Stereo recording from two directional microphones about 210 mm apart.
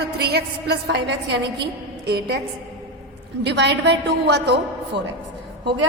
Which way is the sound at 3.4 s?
55° right (ahead or behind).